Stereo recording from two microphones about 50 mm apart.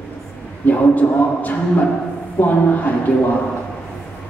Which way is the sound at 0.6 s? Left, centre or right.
Left.